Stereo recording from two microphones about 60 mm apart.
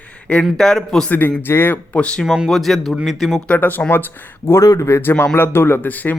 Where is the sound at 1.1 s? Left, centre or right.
Left.